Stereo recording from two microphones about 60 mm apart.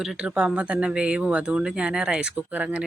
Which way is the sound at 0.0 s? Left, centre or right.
Centre.